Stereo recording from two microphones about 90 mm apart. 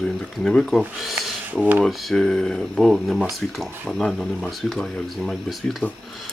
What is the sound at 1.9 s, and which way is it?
Speech, centre (ahead or behind).